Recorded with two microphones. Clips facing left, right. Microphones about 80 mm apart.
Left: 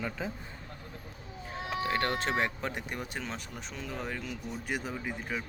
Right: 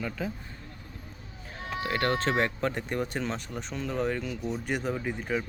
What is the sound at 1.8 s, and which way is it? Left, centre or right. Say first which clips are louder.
Speech: right 4 dB; centre.